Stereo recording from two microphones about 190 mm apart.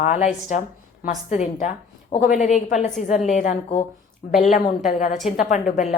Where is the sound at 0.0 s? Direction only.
40° left (ahead or behind).